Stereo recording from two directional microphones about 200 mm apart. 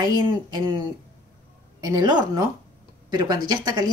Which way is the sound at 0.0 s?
20° right (ahead or behind).